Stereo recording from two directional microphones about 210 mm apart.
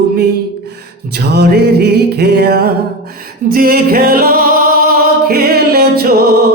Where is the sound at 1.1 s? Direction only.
50° right (ahead or behind).